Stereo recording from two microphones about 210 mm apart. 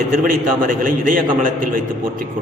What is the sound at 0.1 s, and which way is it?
A man's voice, 40° right (ahead or behind).